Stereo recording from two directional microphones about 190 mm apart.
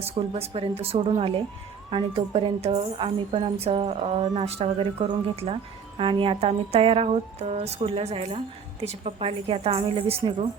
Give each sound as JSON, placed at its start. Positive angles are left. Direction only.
{"t": 0.0, "sound": "a woman's voice", "side_deg": -30}